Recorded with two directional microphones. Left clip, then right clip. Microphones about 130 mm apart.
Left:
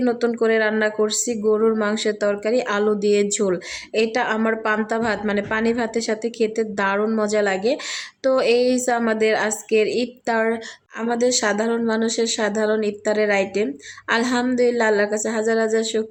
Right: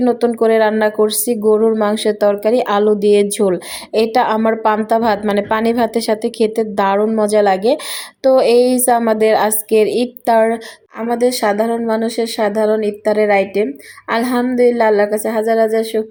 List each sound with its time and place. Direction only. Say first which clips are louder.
0.0 s a woman's voice: right 6 dB; 25° right (ahead or behind)